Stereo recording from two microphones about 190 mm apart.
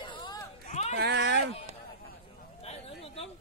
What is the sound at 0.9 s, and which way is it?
Speech, 65° right (ahead or behind).